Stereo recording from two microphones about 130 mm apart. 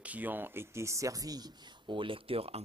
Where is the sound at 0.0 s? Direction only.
10° right (ahead or behind).